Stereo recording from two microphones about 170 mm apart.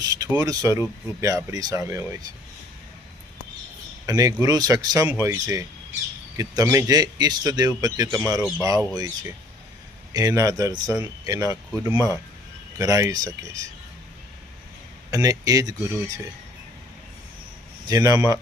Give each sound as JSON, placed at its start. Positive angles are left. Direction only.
{"t": 0.0, "sound": "speech", "side_deg": -20}
{"t": 4.0, "sound": "speech", "side_deg": -20}
{"t": 8.4, "sound": "speech", "side_deg": 5}
{"t": 8.6, "sound": "speech", "side_deg": -20}
{"t": 15.1, "sound": "speech", "side_deg": -20}
{"t": 17.8, "sound": "speech", "side_deg": -20}